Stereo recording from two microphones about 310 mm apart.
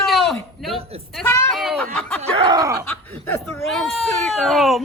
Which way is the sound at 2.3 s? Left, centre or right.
Centre.